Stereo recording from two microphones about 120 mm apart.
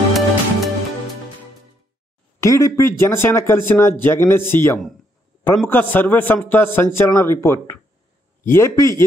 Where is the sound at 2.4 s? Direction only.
25° left (ahead or behind).